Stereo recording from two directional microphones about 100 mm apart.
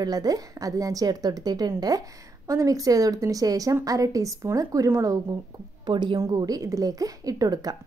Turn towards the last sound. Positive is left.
turn(degrees=-40)  # may be behind; listen again after turning